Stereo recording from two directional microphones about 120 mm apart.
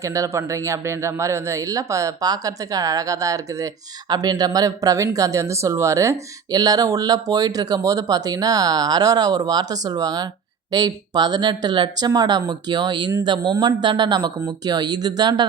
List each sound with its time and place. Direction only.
0.0 s speech: 25° right (ahead or behind)